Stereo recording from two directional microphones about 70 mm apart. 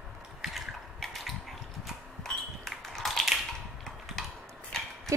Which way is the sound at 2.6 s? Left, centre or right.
Centre.